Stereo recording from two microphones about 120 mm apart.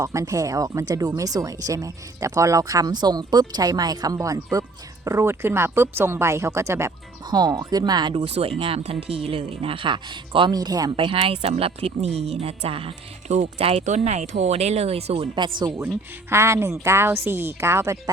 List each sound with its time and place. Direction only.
0.0 s speech: 25° right (ahead or behind)
7.3 s speech: 35° right (ahead or behind)
8.2 s speech: 55° right (ahead or behind); by 10.9 s 35° right (ahead or behind)
10.9 s speech: 50° right (ahead or behind)
13.2 s speech: 70° right (ahead or behind)
13.8 s speech: 75° right (ahead or behind)
15.4 s speech: 40° right (ahead or behind)
16.3 s speech: 20° right (ahead or behind)